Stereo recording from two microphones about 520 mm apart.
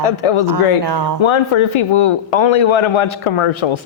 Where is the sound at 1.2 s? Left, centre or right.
Left.